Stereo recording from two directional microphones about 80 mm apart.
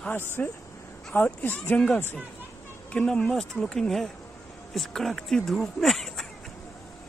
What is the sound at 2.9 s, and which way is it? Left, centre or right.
Speech, centre.